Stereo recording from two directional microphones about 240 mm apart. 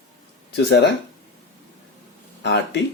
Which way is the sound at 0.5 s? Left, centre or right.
Left.